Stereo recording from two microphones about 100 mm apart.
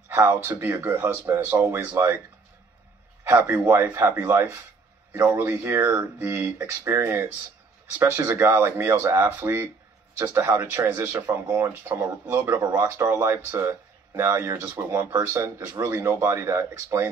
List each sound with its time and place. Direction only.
0.1 s speech: 25° right (ahead or behind)
3.3 s speech: 25° right (ahead or behind)